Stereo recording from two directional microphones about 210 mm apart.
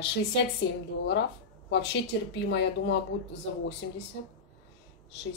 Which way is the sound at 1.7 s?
55° left (ahead or behind).